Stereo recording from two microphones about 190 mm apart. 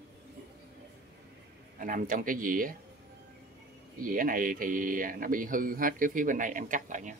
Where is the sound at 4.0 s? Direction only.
45° right (ahead or behind).